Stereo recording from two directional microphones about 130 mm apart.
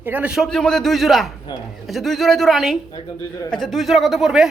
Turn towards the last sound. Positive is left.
turn(degrees=-5)  # may be behind; listen again after turning